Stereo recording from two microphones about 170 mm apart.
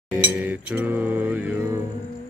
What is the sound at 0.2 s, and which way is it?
Music, 10° right (ahead or behind).